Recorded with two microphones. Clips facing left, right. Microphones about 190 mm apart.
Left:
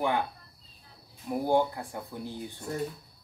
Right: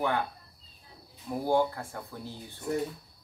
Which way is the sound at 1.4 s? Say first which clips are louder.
Even; 15° left (ahead or behind).